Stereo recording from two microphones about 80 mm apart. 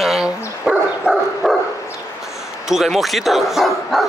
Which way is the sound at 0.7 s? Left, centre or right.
Centre.